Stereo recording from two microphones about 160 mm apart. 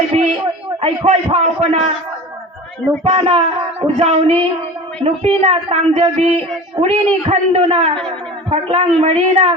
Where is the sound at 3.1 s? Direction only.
35° right (ahead or behind).